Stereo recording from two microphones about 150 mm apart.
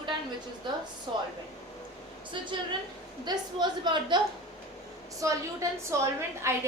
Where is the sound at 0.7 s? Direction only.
30° right (ahead or behind).